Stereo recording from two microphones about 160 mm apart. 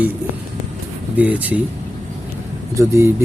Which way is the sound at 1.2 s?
10° right (ahead or behind).